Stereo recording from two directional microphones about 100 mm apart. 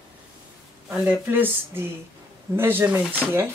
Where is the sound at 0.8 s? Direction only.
20° right (ahead or behind).